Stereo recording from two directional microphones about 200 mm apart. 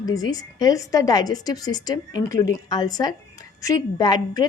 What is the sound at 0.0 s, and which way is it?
A woman's voice, 20° left (ahead or behind).